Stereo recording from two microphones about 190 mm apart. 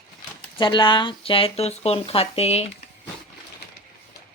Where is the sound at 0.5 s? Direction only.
25° left (ahead or behind).